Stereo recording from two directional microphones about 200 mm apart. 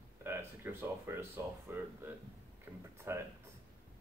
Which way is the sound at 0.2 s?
10° right (ahead or behind).